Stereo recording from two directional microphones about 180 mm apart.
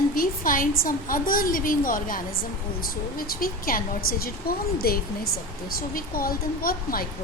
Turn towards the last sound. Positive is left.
turn(degrees=55)  # may be behind; listen again after turning